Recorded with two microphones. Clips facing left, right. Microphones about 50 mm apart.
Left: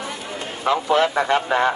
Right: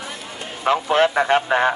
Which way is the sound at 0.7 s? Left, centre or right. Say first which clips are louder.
Right 1 dB; right.